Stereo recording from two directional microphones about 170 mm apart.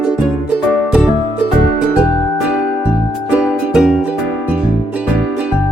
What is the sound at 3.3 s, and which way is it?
Music, 5° right (ahead or behind).